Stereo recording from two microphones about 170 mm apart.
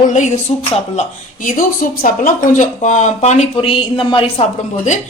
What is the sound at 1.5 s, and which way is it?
Speech, 50° left (ahead or behind).